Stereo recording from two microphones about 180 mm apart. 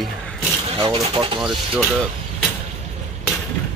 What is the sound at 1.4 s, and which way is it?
Speech, centre (ahead or behind).